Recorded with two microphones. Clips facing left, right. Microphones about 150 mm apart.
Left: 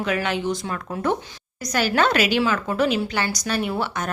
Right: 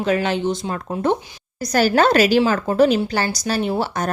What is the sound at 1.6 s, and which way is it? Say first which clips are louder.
Speech: right 5 dB; 40° right (ahead or behind).